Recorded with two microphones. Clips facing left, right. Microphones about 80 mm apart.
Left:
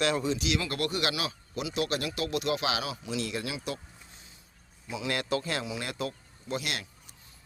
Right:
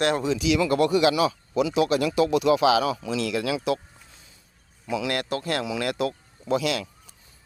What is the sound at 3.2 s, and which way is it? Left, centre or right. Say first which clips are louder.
Speech: right 8 dB; right.